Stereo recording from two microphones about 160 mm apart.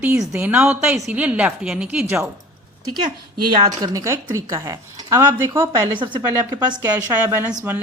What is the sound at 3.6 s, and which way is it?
A woman's voice, 25° right (ahead or behind).